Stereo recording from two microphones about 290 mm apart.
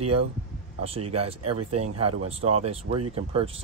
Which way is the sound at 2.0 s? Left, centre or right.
Right.